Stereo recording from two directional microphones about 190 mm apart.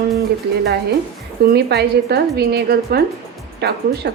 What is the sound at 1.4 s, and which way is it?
A woman's voice, 60° right (ahead or behind).